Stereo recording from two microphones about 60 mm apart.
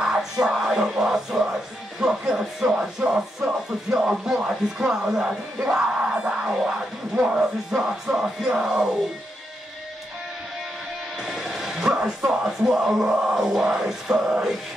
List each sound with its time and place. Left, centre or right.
0.0 s music: centre
11.2 s bow-wow: centre
12.3 s music: centre